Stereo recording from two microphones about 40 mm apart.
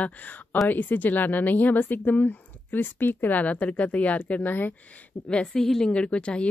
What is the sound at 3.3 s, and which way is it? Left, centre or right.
A woman's voice, left.